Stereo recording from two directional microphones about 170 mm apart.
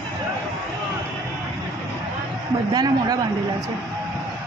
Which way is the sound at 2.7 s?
20° right (ahead or behind).